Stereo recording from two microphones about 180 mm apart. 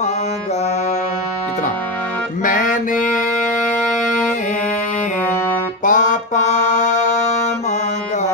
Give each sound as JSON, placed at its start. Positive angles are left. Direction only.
{"t": 2.4, "sound": "music", "side_deg": 45}
{"t": 5.9, "sound": "music", "side_deg": 45}